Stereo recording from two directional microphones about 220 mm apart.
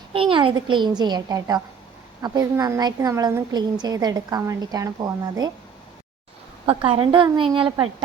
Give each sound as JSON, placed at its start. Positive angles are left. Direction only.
{"t": 0.1, "sound": "a woman's voice", "side_deg": -25}
{"t": 6.7, "sound": "a woman's voice", "side_deg": -25}